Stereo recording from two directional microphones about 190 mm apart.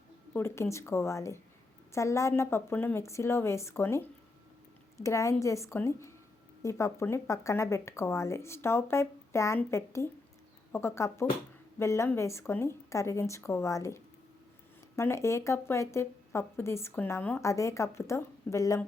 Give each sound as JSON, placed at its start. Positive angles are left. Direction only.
{"t": 0.3, "sound": "speech", "side_deg": 15}